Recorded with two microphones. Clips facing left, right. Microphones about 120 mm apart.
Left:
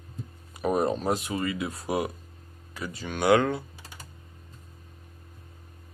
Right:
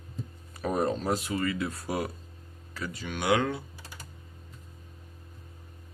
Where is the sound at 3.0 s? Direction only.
40° left (ahead or behind).